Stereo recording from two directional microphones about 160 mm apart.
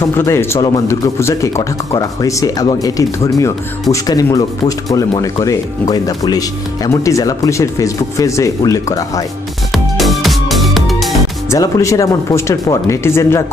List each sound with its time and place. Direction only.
0.0 s speech: 15° left (ahead or behind)
9.7 s music: centre (ahead or behind)
11.5 s speech: 20° left (ahead or behind)